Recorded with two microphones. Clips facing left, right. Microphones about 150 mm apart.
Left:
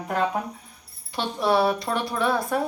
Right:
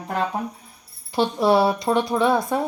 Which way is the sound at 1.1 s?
30° right (ahead or behind).